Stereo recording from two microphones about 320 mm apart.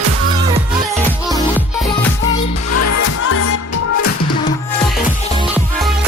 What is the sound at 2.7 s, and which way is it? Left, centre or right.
Music, left.